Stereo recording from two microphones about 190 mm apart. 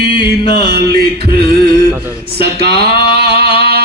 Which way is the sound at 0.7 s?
60° right (ahead or behind).